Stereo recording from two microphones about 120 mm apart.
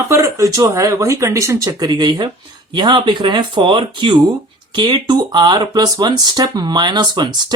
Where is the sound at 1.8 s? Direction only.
35° right (ahead or behind).